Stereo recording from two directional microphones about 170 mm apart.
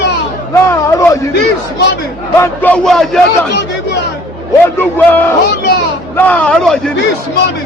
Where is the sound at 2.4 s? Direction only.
10° left (ahead or behind).